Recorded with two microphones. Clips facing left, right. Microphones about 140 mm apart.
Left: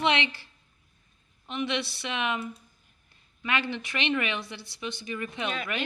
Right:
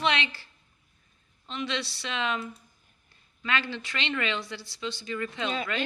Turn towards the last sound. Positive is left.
turn(degrees=20)  # may be behind; listen again after turning